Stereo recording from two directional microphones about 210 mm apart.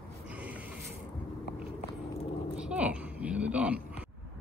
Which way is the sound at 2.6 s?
5° right (ahead or behind).